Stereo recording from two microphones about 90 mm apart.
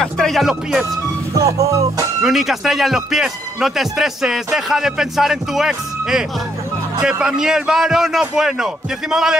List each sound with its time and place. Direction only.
0.0 s speech: 5° left (ahead or behind)
1.4 s music: 35° right (ahead or behind)
2.2 s a man's voice: 5° right (ahead or behind)